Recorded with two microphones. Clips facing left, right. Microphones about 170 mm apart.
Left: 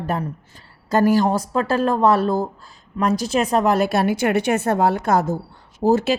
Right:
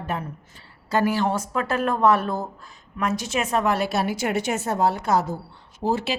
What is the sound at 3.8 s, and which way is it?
A woman's voice, 55° left (ahead or behind).